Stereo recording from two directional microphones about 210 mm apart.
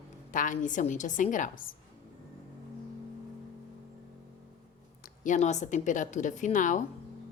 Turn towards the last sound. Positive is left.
turn(degrees=35)  # may be behind; listen again after turning